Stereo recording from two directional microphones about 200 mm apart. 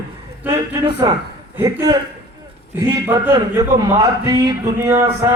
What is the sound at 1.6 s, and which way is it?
Speech, 20° right (ahead or behind).